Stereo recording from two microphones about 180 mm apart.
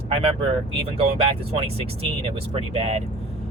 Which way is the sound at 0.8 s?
30° right (ahead or behind).